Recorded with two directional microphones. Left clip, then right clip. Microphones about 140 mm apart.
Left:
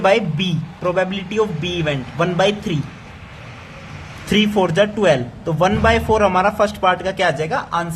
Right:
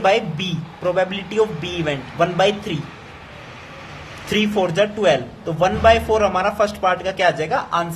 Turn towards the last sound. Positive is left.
turn(degrees=30)  # may be behind; listen again after turning